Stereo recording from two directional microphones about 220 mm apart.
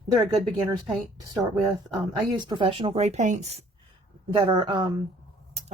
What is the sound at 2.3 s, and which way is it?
Speech, 20° right (ahead or behind).